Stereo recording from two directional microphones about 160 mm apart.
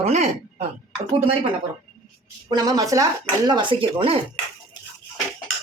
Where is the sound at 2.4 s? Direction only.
25° right (ahead or behind).